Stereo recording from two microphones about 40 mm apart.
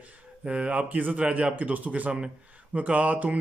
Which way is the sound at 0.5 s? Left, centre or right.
Right.